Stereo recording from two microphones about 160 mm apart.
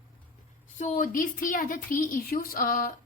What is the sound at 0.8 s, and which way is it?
A woman's voice, 55° left (ahead or behind).